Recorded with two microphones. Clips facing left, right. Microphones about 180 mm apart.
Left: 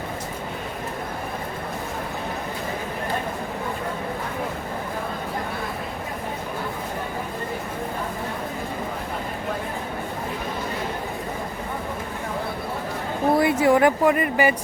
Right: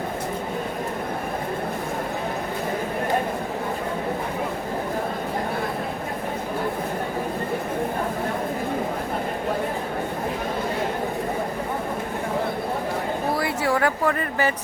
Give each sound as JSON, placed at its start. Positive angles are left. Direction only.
{"t": 13.3, "sound": "speech", "side_deg": 20}